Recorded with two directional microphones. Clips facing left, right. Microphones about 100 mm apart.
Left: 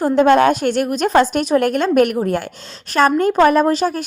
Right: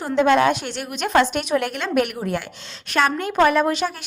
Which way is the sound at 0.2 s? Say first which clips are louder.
Left 3 dB; 45° left (ahead or behind).